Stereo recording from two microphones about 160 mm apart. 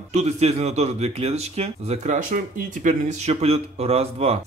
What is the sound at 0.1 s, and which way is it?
Speech, 45° right (ahead or behind).